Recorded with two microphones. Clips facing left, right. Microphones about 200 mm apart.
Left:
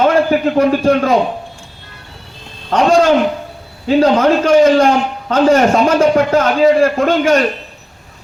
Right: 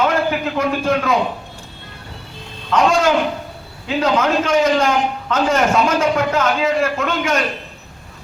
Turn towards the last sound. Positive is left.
turn(degrees=35)  # may be behind; listen again after turning